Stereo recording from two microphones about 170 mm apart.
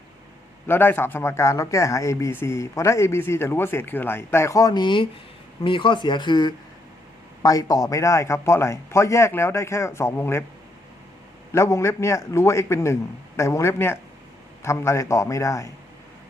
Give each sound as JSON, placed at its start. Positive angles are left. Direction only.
{"t": 0.7, "sound": "speech", "side_deg": 10}
{"t": 11.5, "sound": "speech", "side_deg": 15}